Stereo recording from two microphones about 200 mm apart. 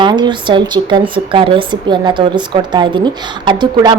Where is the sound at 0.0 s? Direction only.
25° right (ahead or behind).